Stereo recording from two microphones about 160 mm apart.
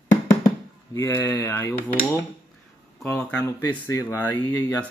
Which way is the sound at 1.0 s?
15° left (ahead or behind).